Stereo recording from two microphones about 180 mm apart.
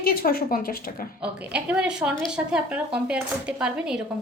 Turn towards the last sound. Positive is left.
turn(degrees=-5)  # may be behind; listen again after turning